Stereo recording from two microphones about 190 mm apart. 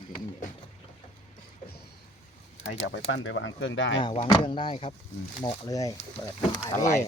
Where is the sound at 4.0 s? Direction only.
25° left (ahead or behind).